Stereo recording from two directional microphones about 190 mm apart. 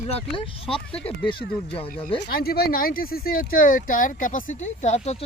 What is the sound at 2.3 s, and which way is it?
Speech, 55° left (ahead or behind).